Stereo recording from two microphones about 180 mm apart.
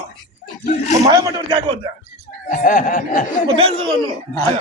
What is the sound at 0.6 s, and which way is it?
Speech, 40° left (ahead or behind).